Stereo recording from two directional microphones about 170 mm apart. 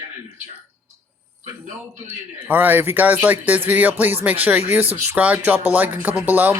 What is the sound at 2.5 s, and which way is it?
Speech, 10° right (ahead or behind).